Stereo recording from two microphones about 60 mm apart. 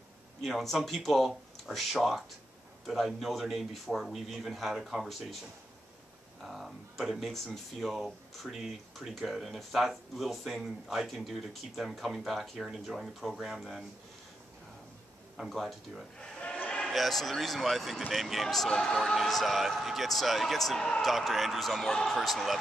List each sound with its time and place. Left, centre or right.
0.4 s speech: centre
6.4 s speech: centre
15.3 s speech: centre
16.2 s a sound: centre
16.8 s a man's voice: centre
19.1 s speech: centre